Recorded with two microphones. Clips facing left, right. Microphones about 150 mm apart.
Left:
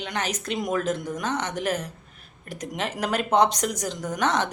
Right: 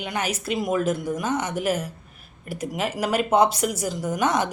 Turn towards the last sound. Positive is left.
turn(degrees=-10)  # may be behind; listen again after turning